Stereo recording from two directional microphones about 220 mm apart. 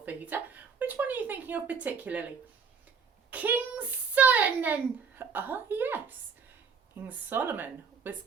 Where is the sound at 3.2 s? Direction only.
5° right (ahead or behind).